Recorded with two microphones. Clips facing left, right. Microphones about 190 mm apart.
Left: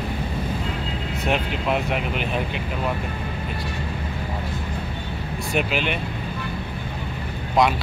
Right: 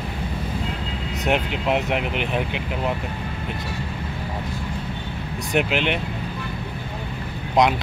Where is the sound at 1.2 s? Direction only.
20° right (ahead or behind).